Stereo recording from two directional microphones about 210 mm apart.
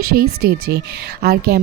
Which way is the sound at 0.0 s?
45° right (ahead or behind).